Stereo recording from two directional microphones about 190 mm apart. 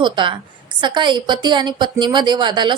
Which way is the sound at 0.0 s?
25° right (ahead or behind).